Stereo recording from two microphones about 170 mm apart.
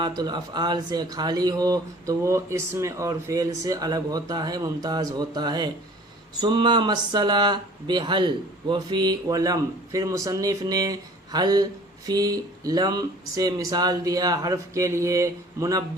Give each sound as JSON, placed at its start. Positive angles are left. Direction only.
{"t": 0.0, "sound": "speech", "side_deg": -25}